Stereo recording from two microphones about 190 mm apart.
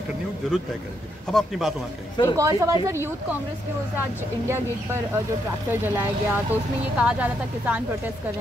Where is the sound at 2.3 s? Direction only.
15° right (ahead or behind).